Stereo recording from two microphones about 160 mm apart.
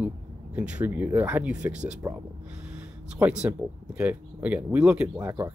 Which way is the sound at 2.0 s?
20° right (ahead or behind).